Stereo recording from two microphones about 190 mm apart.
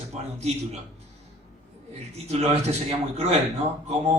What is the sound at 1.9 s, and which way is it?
A man's voice, 35° right (ahead or behind).